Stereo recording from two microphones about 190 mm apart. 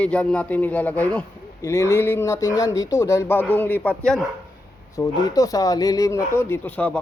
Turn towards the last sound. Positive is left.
turn(degrees=10)  # may be behind; listen again after turning